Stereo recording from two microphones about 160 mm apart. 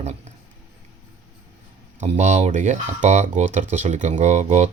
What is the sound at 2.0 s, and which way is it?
Speech, 45° right (ahead or behind).